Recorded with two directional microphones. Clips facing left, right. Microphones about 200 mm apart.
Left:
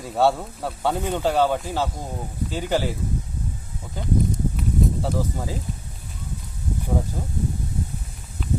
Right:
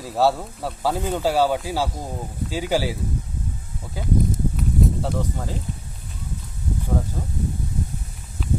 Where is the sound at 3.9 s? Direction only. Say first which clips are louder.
Right 1 dB; 5° right (ahead or behind).